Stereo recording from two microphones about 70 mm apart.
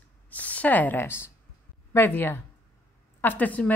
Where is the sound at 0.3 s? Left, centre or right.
Left.